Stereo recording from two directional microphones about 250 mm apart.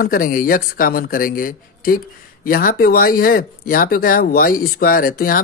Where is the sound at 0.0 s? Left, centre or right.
Left.